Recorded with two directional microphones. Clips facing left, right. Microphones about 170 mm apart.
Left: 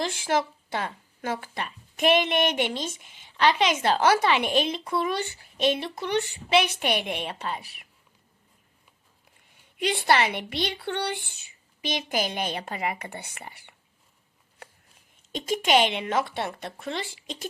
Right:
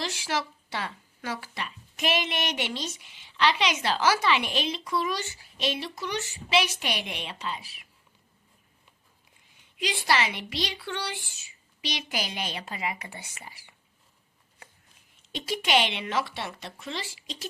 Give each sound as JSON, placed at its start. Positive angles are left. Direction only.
{"t": 0.0, "sound": "a woman's voice", "side_deg": 50}
{"t": 9.7, "sound": "speech", "side_deg": 60}
{"t": 15.3, "sound": "a woman's voice", "side_deg": 45}